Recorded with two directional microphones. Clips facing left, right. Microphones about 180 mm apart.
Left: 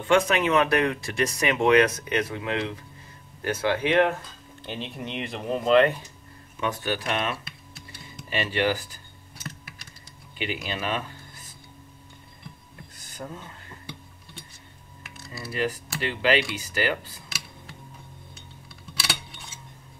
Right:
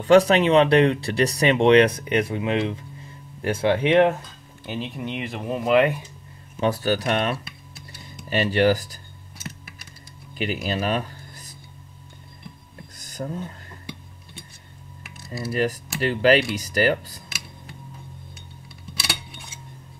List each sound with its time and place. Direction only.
0.0 s speech: 35° right (ahead or behind)
4.6 s speech: 5° right (ahead or behind)
6.6 s speech: 35° right (ahead or behind)
10.3 s speech: 40° right (ahead or behind)
12.9 s a sound: 40° right (ahead or behind)
15.3 s speech: 40° right (ahead or behind)